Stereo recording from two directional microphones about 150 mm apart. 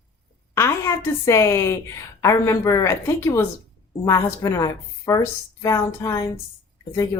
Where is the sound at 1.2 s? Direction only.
20° left (ahead or behind).